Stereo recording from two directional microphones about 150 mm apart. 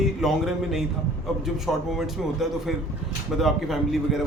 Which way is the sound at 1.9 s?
Centre (ahead or behind).